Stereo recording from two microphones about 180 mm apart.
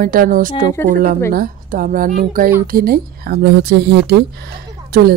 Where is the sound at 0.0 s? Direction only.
50° right (ahead or behind); by 4.2 s 70° right (ahead or behind).